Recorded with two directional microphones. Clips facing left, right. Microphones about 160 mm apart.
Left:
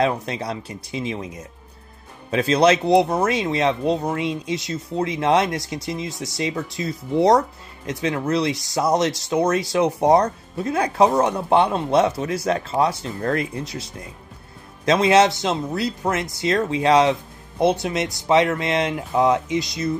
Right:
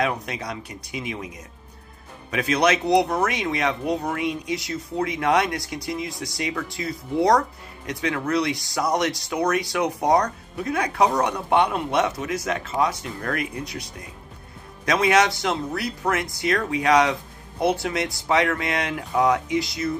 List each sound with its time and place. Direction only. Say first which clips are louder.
0.0 s speech: left 4 dB; 30° left (ahead or behind)
2.3 s speech: left 4 dB; 30° left (ahead or behind)
14.9 s speech: left 4 dB; 25° left (ahead or behind)